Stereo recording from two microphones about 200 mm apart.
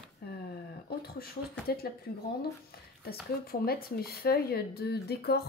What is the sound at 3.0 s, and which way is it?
Speech, 50° left (ahead or behind).